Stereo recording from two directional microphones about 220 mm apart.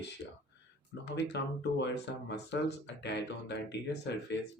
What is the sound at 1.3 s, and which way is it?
Speech, 50° left (ahead or behind).